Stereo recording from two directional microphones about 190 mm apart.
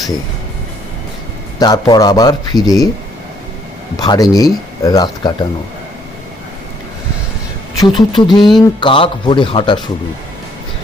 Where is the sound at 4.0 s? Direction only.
20° left (ahead or behind).